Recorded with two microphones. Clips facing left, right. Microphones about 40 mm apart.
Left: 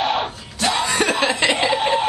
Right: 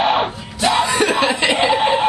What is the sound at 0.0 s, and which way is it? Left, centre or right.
Yell, centre.